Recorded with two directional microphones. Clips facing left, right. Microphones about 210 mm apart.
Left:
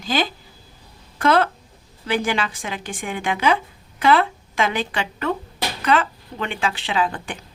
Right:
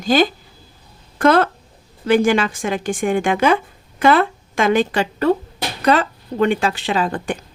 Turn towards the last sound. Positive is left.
turn(degrees=-45)  # may be behind; listen again after turning